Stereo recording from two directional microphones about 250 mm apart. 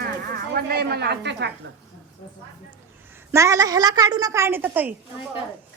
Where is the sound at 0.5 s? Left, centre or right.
Right.